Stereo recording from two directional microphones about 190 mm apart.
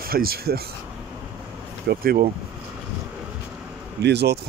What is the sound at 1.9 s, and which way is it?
Speech, 50° right (ahead or behind).